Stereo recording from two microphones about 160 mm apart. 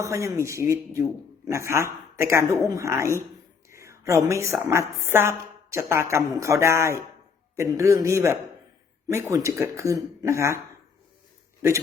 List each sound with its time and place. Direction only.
0.0 s a woman's voice: 20° right (ahead or behind)
3.7 s whispering: 20° right (ahead or behind)
4.7 s a woman's voice: 15° right (ahead or behind)